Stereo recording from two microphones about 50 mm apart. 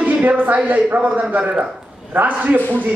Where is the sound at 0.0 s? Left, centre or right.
Right.